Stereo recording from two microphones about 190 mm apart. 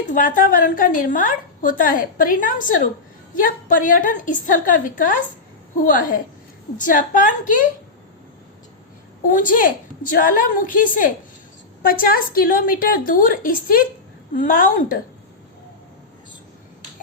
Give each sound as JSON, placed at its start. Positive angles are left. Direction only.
{"t": 0.1, "sound": "a woman's voice", "side_deg": 45}
{"t": 9.3, "sound": "a woman's voice", "side_deg": 45}